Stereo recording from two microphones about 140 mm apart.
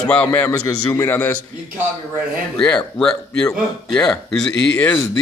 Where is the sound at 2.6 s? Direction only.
5° left (ahead or behind).